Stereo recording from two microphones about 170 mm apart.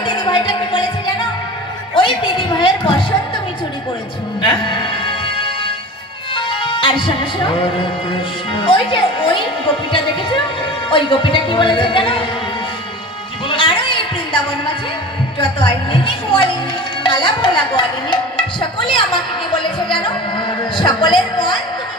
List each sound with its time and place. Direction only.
0.0 s music: 25° left (ahead or behind)
2.0 s a sound: 30° left (ahead or behind)
4.4 s music: 30° left (ahead or behind)
6.3 s speech: 30° left (ahead or behind)
10.8 s speech: 30° left (ahead or behind)
13.5 s a sound: 30° left (ahead or behind)
15.4 s a woman's voice: 30° left (ahead or behind)
17.0 s music: 30° left (ahead or behind)